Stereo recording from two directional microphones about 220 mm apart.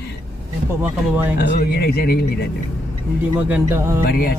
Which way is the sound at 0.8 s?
10° right (ahead or behind).